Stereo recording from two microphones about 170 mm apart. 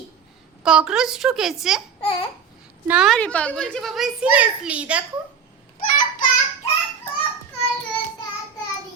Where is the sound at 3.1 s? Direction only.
5° left (ahead or behind).